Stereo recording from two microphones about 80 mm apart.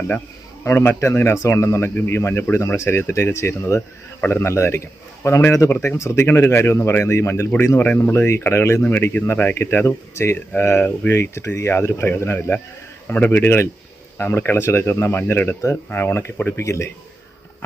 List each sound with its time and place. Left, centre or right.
0.6 s a man's voice: left